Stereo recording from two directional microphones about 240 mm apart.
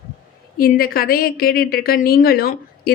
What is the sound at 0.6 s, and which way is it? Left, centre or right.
A woman's voice, left.